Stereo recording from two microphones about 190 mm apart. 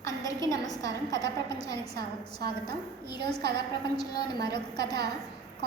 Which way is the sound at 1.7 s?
60° right (ahead or behind).